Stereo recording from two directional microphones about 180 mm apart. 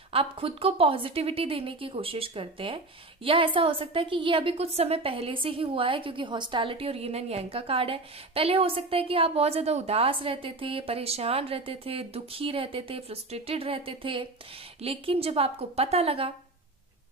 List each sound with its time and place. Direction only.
0.1 s a woman's voice: 30° right (ahead or behind)